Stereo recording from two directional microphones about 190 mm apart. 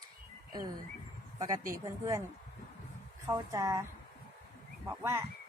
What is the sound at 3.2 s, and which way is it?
Speech, 15° right (ahead or behind).